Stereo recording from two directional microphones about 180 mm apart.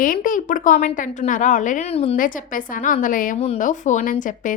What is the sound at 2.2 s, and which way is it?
A woman's voice, 50° left (ahead or behind).